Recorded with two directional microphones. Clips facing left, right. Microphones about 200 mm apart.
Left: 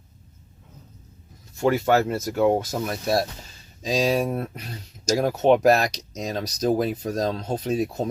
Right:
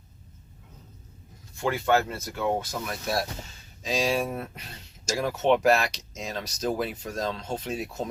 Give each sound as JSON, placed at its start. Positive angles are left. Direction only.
{"t": 1.6, "sound": "speech", "side_deg": 40}